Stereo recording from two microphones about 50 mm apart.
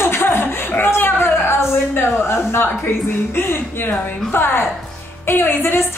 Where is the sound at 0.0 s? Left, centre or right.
Left.